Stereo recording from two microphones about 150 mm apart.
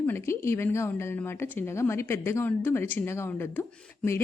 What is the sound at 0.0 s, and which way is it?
A woman's voice, 15° left (ahead or behind).